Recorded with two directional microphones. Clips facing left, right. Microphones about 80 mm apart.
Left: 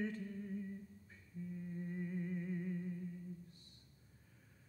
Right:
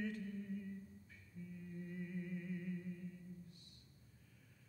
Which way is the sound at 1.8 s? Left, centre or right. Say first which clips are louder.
Left 4 dB; left.